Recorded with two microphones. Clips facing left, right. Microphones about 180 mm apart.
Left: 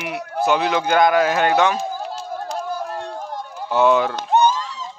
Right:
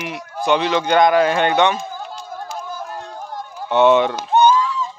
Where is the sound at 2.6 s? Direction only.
30° left (ahead or behind).